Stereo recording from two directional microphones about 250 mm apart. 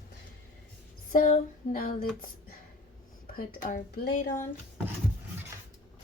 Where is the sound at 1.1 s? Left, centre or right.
Left.